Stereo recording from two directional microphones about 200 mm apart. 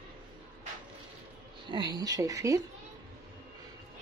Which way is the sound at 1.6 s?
20° right (ahead or behind).